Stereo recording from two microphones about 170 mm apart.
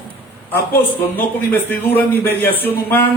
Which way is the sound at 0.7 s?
10° left (ahead or behind).